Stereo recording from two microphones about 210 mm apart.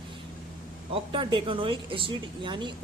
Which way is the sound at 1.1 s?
25° right (ahead or behind).